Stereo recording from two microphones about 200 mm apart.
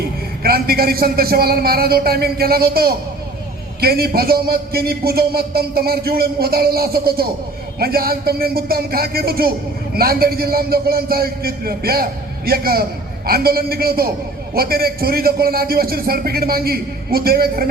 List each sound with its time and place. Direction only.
0.4 s speech: 50° right (ahead or behind)